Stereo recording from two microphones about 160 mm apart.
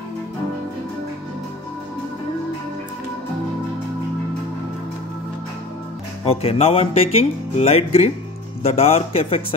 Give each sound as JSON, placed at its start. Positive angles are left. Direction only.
{"t": 6.2, "sound": "speech", "side_deg": 40}